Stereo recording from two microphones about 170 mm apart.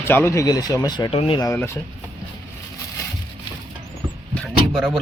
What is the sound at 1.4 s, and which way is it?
Speech, 15° left (ahead or behind).